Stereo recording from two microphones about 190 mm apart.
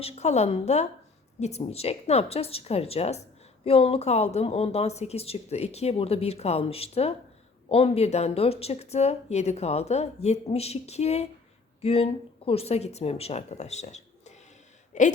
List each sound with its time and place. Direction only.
0.0 s a woman's voice: 35° left (ahead or behind)